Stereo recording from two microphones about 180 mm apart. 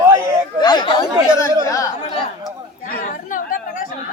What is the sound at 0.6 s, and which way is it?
Speech, 25° left (ahead or behind).